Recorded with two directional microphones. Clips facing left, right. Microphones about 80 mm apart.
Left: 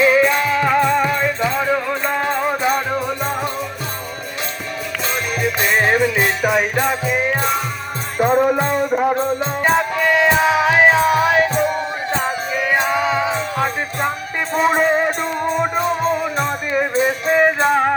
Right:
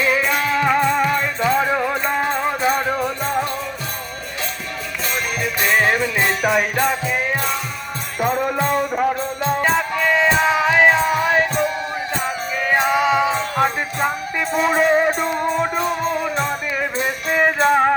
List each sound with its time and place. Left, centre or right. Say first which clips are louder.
0.0 s music: left 5 dB; centre
5.6 s jingle bell: left 1 dB; centre
8.2 s music: left 4 dB; left; by 12.8 s centre
12.9 s music: right 1 dB; centre
14.8 s music: right 1 dB; centre